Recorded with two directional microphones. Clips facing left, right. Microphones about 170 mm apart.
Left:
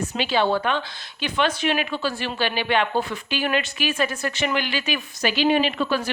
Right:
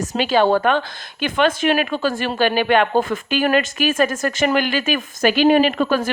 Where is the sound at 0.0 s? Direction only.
45° right (ahead or behind).